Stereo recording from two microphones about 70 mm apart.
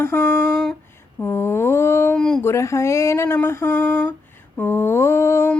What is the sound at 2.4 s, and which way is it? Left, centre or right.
Speech, left.